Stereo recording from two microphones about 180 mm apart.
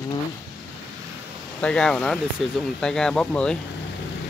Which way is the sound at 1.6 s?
5° left (ahead or behind).